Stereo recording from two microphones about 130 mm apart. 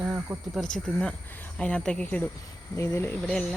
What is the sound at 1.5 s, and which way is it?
Speech, 5° left (ahead or behind).